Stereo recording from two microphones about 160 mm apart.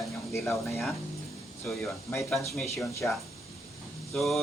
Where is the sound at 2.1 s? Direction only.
10° left (ahead or behind).